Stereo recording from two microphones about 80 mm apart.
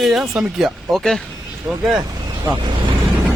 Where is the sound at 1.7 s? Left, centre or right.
Right.